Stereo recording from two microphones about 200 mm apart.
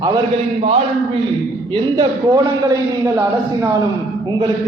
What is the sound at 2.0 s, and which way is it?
Speech, 20° right (ahead or behind).